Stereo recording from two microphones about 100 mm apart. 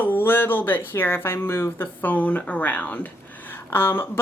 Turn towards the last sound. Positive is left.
turn(degrees=25)  # may be behind; listen again after turning